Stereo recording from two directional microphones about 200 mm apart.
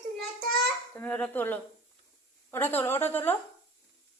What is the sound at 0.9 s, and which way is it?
A woman's voice, 10° left (ahead or behind).